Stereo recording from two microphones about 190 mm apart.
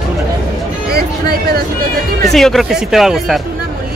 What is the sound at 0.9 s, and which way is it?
Speech, 55° right (ahead or behind).